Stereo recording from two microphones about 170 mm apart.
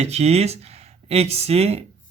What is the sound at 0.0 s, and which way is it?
Speech, 40° right (ahead or behind).